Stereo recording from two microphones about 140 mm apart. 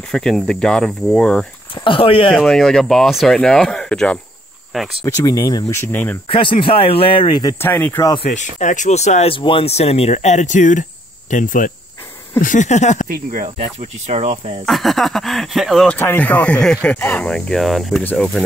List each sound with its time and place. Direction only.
0.1 s speech: 5° left (ahead or behind)
1.9 s speech: 40° left (ahead or behind)
2.3 s speech: 5° left (ahead or behind)
5.0 s speech: 25° left (ahead or behind)
5.9 s speech: 10° left (ahead or behind)
6.2 s speech: 40° left (ahead or behind)
7.6 s speech: 15° left (ahead or behind)
8.3 s speech: 60° left (ahead or behind)
13.1 s speech: 75° right (ahead or behind)
13.6 s speech: 50° right (ahead or behind)
14.7 s speech: centre (ahead or behind)
16.0 s speech: 15° left (ahead or behind)